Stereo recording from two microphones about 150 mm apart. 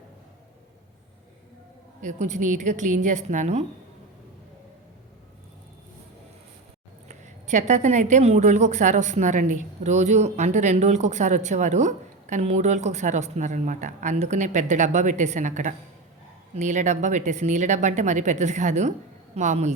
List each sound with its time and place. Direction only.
2.0 s a woman's voice: 55° right (ahead or behind)
7.1 s a woman's voice: 50° right (ahead or behind)